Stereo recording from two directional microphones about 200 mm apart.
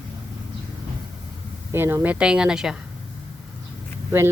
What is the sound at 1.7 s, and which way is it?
Speech, 10° right (ahead or behind).